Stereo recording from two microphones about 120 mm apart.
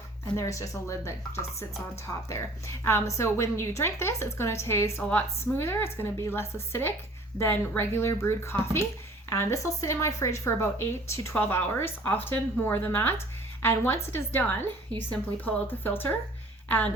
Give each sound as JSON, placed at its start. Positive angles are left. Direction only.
{"t": 0.3, "sound": "a woman's voice", "side_deg": 25}